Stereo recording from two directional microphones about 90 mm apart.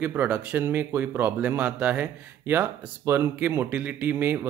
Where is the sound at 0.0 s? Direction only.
20° right (ahead or behind).